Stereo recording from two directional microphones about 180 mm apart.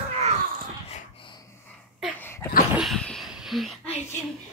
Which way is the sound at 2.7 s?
Centre (ahead or behind).